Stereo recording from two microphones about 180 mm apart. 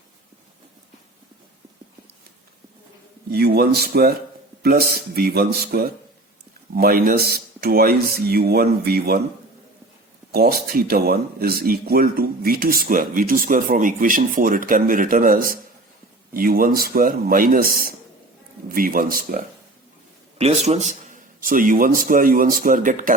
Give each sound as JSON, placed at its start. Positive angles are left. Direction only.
{"t": 3.3, "sound": "speech", "side_deg": -60}
{"t": 10.3, "sound": "speech", "side_deg": -55}
{"t": 20.4, "sound": "speech", "side_deg": -35}